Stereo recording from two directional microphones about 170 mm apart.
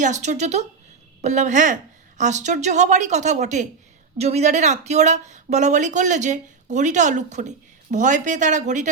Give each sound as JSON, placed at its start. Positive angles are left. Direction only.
{"t": 0.0, "sound": "speech", "side_deg": -45}